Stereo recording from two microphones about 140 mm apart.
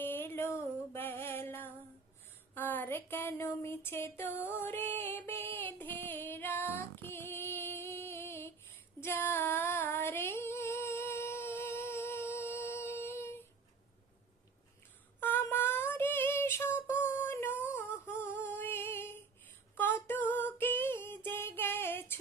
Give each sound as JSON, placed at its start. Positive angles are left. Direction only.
{"t": 0.0, "sound": "music", "side_deg": 15}
{"t": 2.6, "sound": "a sound", "side_deg": 15}
{"t": 9.0, "sound": "female singing", "side_deg": 15}
{"t": 15.2, "sound": "female singing", "side_deg": 15}
{"t": 17.7, "sound": "humming", "side_deg": 15}
{"t": 20.1, "sound": "female singing", "side_deg": 15}